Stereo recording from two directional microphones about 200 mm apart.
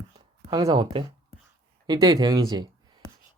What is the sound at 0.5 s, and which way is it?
Speech, 20° right (ahead or behind).